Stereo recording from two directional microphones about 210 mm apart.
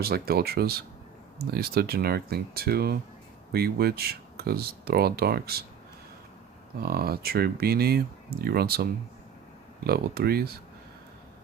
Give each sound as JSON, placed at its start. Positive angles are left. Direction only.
{"t": 0.0, "sound": "speech", "side_deg": -45}
{"t": 6.8, "sound": "speech", "side_deg": -50}